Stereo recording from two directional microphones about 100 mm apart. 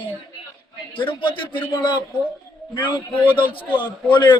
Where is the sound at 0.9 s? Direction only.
55° left (ahead or behind).